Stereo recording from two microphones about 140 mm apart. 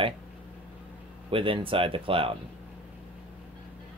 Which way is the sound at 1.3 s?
40° right (ahead or behind).